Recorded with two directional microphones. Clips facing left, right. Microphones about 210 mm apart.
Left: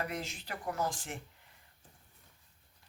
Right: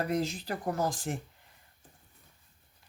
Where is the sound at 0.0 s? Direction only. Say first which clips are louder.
Right 8 dB; 35° right (ahead or behind).